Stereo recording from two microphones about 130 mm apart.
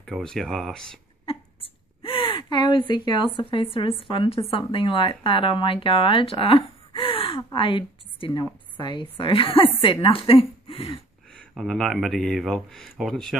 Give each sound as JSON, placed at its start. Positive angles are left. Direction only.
{"t": 0.0, "sound": "speech", "side_deg": 5}
{"t": 1.2, "sound": "a sound", "side_deg": 45}
{"t": 4.6, "sound": "a woman's voice", "side_deg": 40}
{"t": 11.3, "sound": "speech", "side_deg": 5}